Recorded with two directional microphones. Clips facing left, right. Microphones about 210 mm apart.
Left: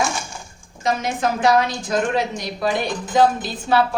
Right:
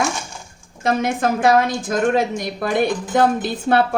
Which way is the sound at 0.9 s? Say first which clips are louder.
Right 3 dB; 55° right (ahead or behind).